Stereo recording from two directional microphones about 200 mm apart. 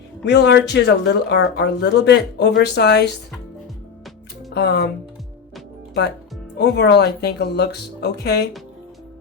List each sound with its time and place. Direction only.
0.3 s speech: 60° left (ahead or behind)
4.5 s speech: 55° left (ahead or behind)
5.9 s speech: 55° left (ahead or behind)